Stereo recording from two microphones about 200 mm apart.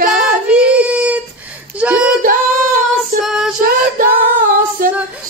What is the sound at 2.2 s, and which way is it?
Singing, 45° right (ahead or behind).